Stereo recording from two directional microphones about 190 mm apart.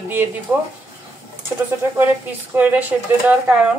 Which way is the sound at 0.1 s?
10° right (ahead or behind).